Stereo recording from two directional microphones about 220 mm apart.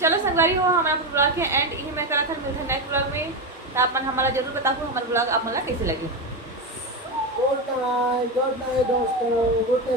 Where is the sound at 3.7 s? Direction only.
10° right (ahead or behind).